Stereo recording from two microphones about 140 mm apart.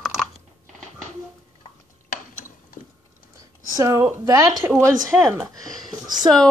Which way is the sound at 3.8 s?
25° right (ahead or behind).